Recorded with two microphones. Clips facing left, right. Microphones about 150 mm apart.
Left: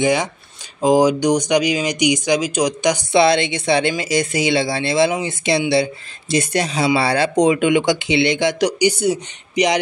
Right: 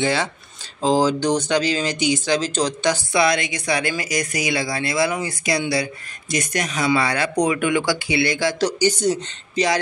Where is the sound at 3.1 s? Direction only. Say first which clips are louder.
Left 8 dB; 30° left (ahead or behind).